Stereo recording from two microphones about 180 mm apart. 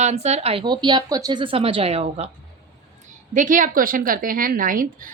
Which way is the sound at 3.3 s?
45° right (ahead or behind).